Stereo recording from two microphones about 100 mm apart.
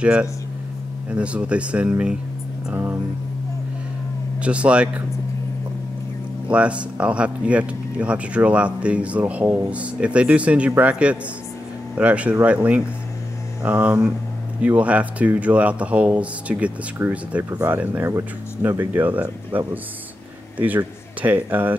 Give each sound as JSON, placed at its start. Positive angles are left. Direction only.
{"t": 0.0, "sound": "speech", "side_deg": -10}
{"t": 4.4, "sound": "speech", "side_deg": -10}
{"t": 6.5, "sound": "speech", "side_deg": -10}
{"t": 18.0, "sound": "speech", "side_deg": -30}